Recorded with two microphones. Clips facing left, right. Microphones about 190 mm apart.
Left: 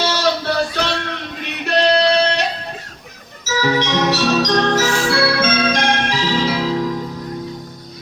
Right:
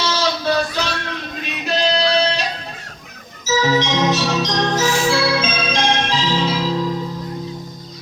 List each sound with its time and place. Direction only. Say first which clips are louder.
0.2 s music: left 1 dB; 60° left (ahead or behind)
3.4 s organ: right 1 dB; 65° left (ahead or behind)